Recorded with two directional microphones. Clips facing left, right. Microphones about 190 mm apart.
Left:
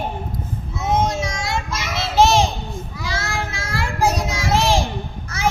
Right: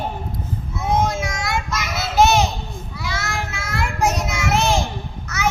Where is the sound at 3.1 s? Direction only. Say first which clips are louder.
Left 2 dB; 30° left (ahead or behind).